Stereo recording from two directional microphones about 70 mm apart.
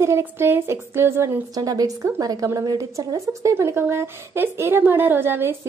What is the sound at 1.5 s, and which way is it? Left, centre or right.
A woman's voice, right.